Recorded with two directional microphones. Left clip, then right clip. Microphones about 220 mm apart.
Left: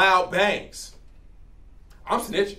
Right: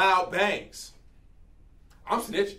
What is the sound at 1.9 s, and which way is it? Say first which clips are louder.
Speech: left 3 dB; 10° right (ahead or behind).